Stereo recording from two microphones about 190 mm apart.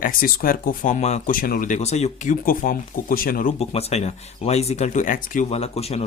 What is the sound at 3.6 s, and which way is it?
Speech, 35° left (ahead or behind).